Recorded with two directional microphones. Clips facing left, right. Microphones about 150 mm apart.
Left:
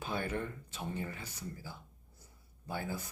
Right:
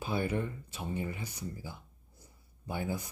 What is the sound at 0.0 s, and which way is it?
Speech, 10° right (ahead or behind).